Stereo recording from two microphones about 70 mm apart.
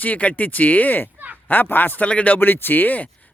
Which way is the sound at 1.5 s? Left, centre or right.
Left.